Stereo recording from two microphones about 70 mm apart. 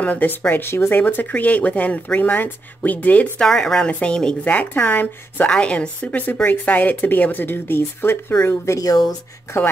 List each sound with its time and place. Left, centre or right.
0.0 s speech: left
3.3 s a woman's voice: centre; by 5.5 s left
5.5 s speech: centre; by 8.4 s left
8.5 s speech: left
8.8 s speech: left